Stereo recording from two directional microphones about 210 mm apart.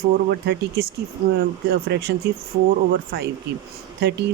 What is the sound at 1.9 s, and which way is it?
Speech, 55° right (ahead or behind).